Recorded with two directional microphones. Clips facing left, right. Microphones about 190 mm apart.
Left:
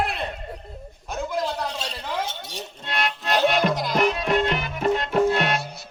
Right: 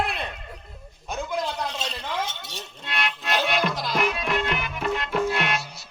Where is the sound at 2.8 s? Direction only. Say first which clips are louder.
Left 3 dB; 40° left (ahead or behind).